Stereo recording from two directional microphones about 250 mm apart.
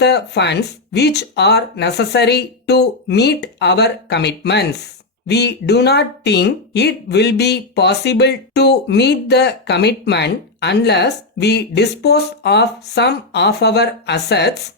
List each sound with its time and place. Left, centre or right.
0.0 s speech: left